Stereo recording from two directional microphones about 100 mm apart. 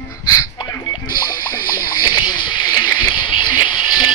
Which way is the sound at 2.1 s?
45° left (ahead or behind).